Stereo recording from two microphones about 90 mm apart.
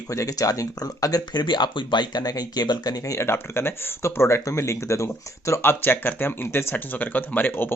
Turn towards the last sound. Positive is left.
turn(degrees=20)  # may be behind; listen again after turning